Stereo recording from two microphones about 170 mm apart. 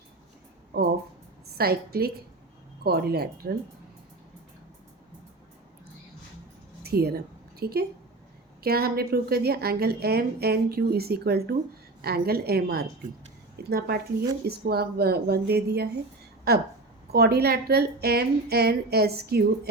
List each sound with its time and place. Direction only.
1.5 s a woman's voice: 65° right (ahead or behind)
6.8 s a woman's voice: 65° right (ahead or behind)